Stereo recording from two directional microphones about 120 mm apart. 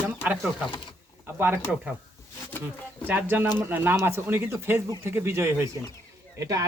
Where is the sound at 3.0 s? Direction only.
15° right (ahead or behind).